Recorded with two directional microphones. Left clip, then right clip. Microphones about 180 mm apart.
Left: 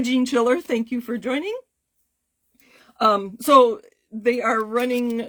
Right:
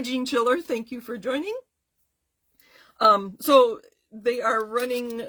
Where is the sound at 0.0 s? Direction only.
30° left (ahead or behind).